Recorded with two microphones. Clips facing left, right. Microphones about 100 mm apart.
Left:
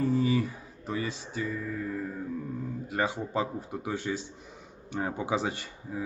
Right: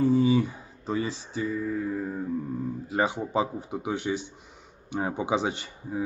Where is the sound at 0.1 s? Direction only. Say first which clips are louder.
Right 4 dB; 25° right (ahead or behind).